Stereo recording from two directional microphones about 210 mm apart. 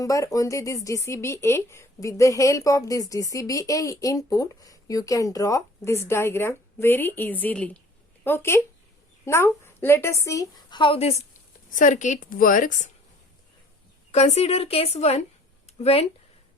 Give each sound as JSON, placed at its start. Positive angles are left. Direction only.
{"t": 0.0, "sound": "a woman's voice", "side_deg": 15}
{"t": 14.1, "sound": "a woman's voice", "side_deg": 30}
{"t": 15.6, "sound": "a sound", "side_deg": 30}